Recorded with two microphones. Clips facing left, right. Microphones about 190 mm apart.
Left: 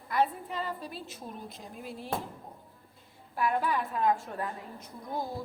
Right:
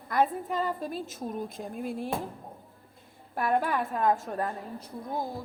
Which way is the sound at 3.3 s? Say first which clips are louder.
Right 2 dB; 50° right (ahead or behind).